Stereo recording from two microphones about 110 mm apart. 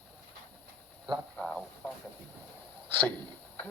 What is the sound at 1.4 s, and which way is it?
Speech, 10° left (ahead or behind).